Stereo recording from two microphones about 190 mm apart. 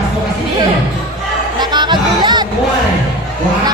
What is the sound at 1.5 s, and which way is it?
Music, 25° right (ahead or behind).